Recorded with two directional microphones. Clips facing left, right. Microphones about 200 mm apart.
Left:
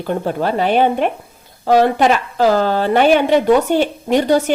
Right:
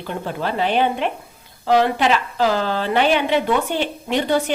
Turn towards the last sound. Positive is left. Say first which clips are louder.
# left 5 dB
turn(degrees=45)  # may be behind; listen again after turning